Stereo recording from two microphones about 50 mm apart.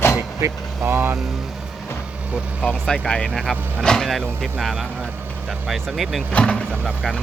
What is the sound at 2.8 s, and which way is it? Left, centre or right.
Speech, centre.